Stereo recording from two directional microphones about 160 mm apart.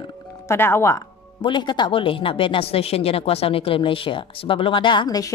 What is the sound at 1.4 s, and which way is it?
Speech, 30° left (ahead or behind).